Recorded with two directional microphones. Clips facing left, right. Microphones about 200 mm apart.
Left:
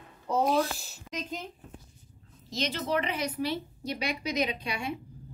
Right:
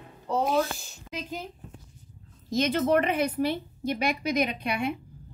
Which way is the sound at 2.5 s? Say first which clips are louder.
Right 7 dB; 55° right (ahead or behind).